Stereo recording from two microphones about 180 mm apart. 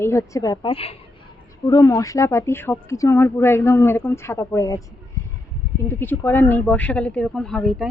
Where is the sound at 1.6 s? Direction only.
20° left (ahead or behind).